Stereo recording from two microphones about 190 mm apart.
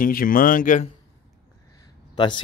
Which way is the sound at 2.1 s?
25° left (ahead or behind).